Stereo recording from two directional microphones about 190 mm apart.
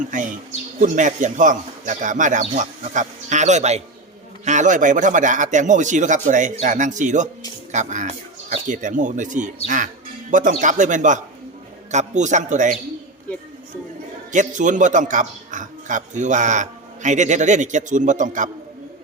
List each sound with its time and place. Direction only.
0.0 s a man's voice: 40° right (ahead or behind)
14.3 s a man's voice: 40° right (ahead or behind)